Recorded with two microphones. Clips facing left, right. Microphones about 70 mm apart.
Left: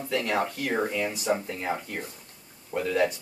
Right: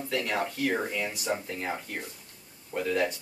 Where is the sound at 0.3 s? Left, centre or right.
Centre.